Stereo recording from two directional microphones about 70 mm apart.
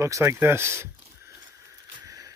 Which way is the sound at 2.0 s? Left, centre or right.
Right.